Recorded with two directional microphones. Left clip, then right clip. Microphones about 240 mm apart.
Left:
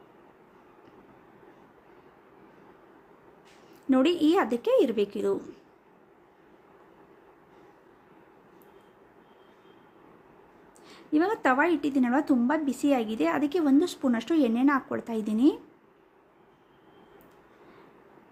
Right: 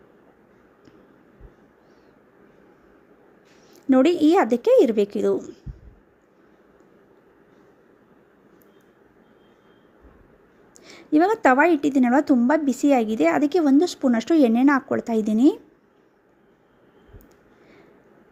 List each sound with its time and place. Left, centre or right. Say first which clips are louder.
3.8 s a woman's voice: right 6 dB; right
10.8 s a woman's voice: right 7 dB; right